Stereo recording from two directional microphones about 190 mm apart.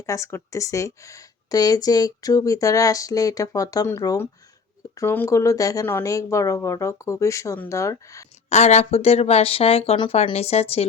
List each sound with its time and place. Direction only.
0.0 s speech: 15° left (ahead or behind)
8.4 s speech: 35° left (ahead or behind)